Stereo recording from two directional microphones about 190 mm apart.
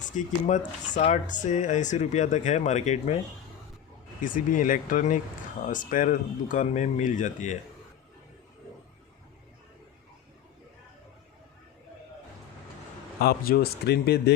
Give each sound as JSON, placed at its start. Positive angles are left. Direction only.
{"t": 0.0, "sound": "speech", "side_deg": 40}
{"t": 4.2, "sound": "speech", "side_deg": 45}
{"t": 13.1, "sound": "speech", "side_deg": 50}